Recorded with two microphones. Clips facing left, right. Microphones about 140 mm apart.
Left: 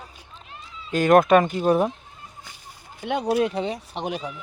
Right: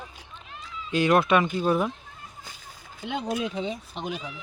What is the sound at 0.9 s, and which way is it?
Speech, 45° left (ahead or behind).